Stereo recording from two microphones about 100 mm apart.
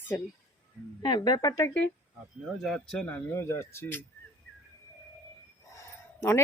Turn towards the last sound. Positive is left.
turn(degrees=30)  # may be behind; listen again after turning